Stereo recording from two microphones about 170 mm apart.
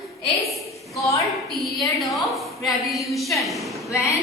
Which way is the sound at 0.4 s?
Centre (ahead or behind).